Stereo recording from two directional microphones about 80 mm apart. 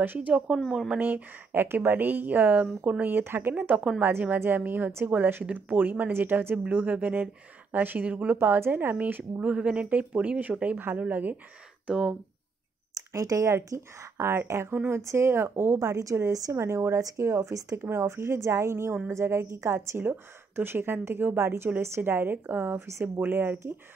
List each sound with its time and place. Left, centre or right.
0.0 s a woman's voice: right
0.7 s speech: centre
0.9 s a woman's voice: right
3.5 s a woman's voice: centre
8.4 s a woman's voice: right; by 12.2 s centre
12.9 s a woman's voice: right